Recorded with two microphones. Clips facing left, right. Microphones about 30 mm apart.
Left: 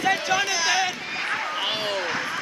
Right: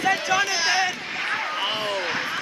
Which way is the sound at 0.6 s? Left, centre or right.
Right.